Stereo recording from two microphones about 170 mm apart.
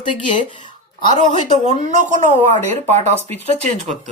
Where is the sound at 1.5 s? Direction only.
40° right (ahead or behind).